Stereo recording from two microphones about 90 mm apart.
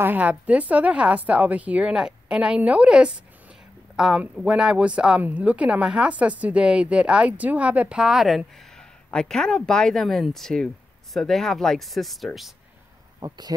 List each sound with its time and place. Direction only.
0.0 s a woman's voice: 20° right (ahead or behind); by 8.8 s centre (ahead or behind)
9.1 s speech: 10° left (ahead or behind)
13.2 s speech: 45° right (ahead or behind)